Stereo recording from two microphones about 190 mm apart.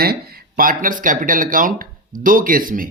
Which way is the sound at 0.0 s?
50° right (ahead or behind).